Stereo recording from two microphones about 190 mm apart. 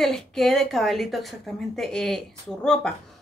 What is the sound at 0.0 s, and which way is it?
A woman's voice, centre (ahead or behind).